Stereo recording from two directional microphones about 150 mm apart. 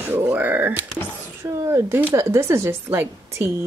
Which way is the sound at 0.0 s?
10° right (ahead or behind).